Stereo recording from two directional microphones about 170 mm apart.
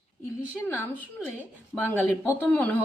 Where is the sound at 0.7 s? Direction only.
15° left (ahead or behind).